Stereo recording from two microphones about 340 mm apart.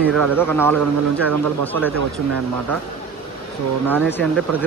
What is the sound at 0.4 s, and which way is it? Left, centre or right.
Speech, centre.